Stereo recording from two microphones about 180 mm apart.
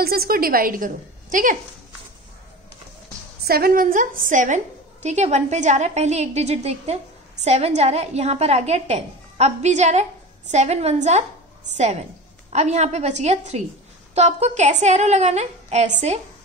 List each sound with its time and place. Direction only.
0.0 s a woman's voice: 55° right (ahead or behind)
3.4 s a woman's voice: 55° right (ahead or behind); by 16.2 s 40° right (ahead or behind)